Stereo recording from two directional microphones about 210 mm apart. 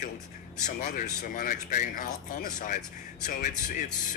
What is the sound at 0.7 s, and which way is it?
Speech, 35° left (ahead or behind).